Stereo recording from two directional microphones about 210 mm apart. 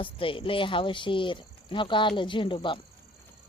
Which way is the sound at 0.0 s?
25° left (ahead or behind).